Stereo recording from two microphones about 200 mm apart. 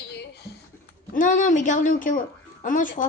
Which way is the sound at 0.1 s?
55° left (ahead or behind).